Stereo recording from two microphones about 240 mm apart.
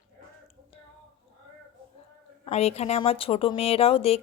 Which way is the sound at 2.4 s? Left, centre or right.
Left.